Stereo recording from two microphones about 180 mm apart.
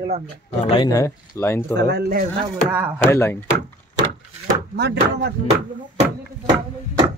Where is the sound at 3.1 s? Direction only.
15° left (ahead or behind).